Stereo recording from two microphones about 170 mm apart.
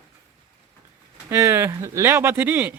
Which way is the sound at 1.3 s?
15° right (ahead or behind).